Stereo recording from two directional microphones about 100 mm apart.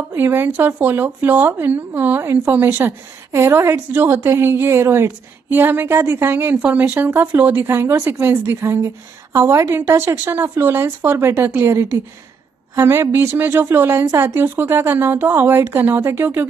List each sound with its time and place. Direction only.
0.1 s speech: 20° right (ahead or behind)